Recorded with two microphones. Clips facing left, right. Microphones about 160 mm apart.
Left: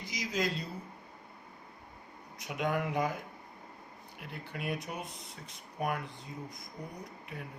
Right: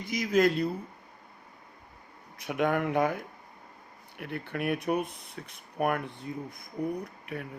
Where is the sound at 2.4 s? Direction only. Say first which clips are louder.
Right 5 dB; 60° right (ahead or behind).